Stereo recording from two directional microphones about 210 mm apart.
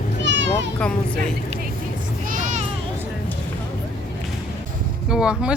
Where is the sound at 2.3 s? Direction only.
35° right (ahead or behind).